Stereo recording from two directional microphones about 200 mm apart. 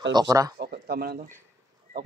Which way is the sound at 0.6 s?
50° right (ahead or behind).